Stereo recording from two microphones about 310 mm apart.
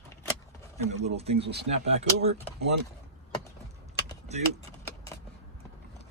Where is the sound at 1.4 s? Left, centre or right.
Right.